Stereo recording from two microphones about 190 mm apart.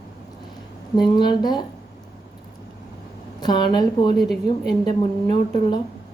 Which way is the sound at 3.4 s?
20° left (ahead or behind).